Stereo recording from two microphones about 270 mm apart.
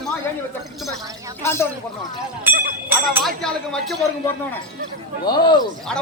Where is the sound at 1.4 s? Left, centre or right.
Centre.